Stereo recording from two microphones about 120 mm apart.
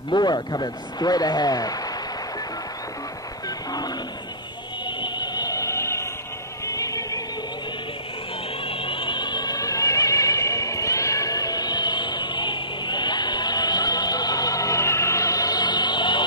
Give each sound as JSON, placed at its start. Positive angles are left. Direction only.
{"t": 0.1, "sound": "speech", "side_deg": 35}
{"t": 3.4, "sound": "wild animals", "side_deg": 35}
{"t": 4.8, "sound": "a sound", "side_deg": 40}
{"t": 6.6, "sound": "music", "side_deg": 30}
{"t": 8.6, "sound": "opera", "side_deg": 50}